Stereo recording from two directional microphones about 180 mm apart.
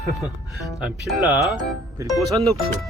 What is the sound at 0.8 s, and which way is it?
Speech, 5° right (ahead or behind).